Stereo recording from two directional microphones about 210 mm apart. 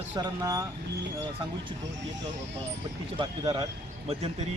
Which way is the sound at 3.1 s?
20° right (ahead or behind).